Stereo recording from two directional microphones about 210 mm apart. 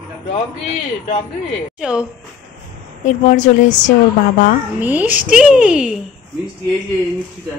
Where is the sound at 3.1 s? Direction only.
35° left (ahead or behind).